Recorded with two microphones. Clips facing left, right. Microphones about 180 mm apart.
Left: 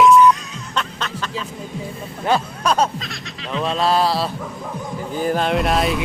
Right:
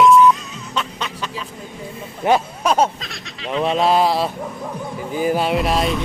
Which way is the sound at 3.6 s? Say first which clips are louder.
Right 2 dB; 15° right (ahead or behind).